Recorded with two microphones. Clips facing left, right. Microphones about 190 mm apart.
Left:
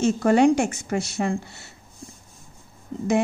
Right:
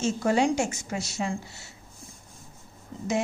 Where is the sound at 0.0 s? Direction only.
60° left (ahead or behind).